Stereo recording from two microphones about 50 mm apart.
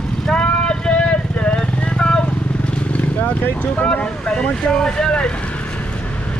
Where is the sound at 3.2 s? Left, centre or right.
Left; by 5.3 s centre.